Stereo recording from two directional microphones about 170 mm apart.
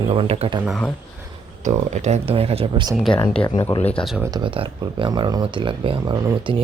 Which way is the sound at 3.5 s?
50° left (ahead or behind).